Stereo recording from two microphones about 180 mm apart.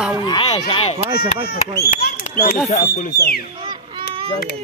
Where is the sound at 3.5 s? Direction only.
25° right (ahead or behind).